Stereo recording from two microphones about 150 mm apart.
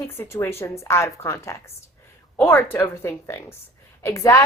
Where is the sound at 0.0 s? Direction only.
15° left (ahead or behind).